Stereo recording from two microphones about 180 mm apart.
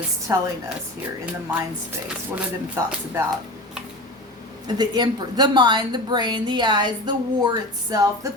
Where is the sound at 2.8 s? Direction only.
15° right (ahead or behind).